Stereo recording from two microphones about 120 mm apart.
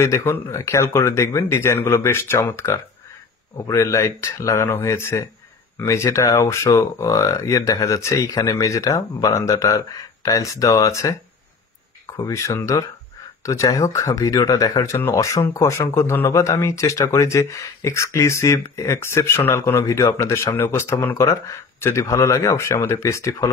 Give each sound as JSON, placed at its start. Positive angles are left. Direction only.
{"t": 0.0, "sound": "speech", "side_deg": 20}
{"t": 12.2, "sound": "speech", "side_deg": 25}